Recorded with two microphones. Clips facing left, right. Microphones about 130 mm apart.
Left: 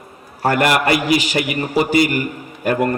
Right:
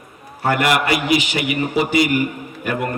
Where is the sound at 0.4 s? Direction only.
45° left (ahead or behind).